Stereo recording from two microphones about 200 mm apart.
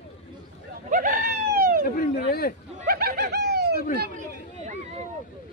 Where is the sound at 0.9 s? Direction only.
40° right (ahead or behind).